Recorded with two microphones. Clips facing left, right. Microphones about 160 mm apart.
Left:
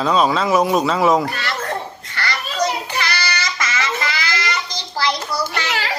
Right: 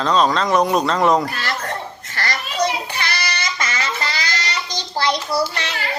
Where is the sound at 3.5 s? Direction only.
30° right (ahead or behind).